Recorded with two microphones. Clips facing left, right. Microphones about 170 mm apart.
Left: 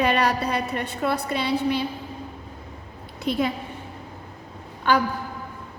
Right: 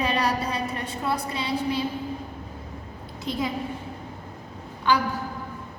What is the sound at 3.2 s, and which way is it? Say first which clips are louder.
Speech: left 5 dB; 65° left (ahead or behind).